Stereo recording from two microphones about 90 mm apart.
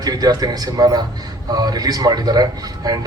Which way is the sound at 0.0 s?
45° right (ahead or behind).